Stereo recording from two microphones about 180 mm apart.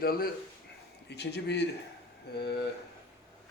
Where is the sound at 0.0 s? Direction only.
55° left (ahead or behind).